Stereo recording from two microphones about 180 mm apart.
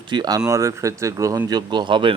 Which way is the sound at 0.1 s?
20° right (ahead or behind).